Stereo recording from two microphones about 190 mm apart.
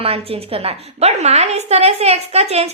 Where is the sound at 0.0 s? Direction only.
30° right (ahead or behind).